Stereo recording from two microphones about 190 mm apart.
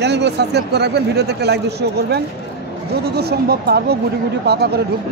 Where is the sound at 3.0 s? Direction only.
55° right (ahead or behind).